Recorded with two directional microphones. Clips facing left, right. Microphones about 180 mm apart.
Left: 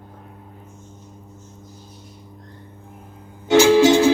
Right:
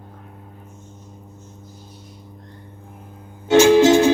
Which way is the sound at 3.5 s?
20° right (ahead or behind).